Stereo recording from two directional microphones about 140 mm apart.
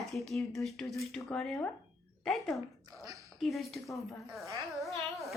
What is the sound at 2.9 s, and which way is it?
Speech, 25° right (ahead or behind).